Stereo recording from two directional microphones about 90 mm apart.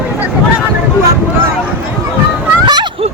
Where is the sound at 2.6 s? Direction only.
55° right (ahead or behind).